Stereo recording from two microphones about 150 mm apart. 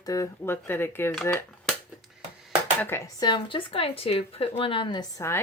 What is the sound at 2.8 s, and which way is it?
Speech, 20° left (ahead or behind).